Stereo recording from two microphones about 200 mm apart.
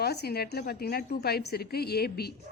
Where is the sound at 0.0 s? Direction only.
55° left (ahead or behind).